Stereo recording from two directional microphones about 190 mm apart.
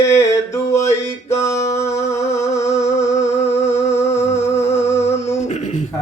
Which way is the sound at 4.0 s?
15° left (ahead or behind).